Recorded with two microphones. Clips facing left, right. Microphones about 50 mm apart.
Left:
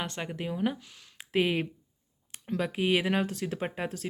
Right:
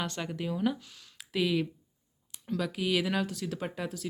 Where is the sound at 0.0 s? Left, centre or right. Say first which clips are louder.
Even; left.